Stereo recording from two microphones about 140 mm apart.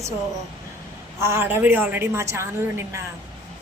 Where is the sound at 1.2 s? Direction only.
20° right (ahead or behind).